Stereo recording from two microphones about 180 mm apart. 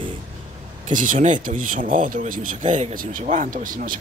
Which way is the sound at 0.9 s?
50° right (ahead or behind).